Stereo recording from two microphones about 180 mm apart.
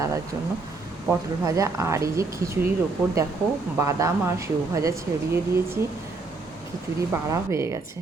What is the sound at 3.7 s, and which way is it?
A woman's voice, 15° right (ahead or behind).